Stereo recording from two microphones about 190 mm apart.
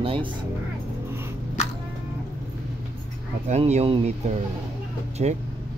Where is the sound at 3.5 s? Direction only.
35° right (ahead or behind).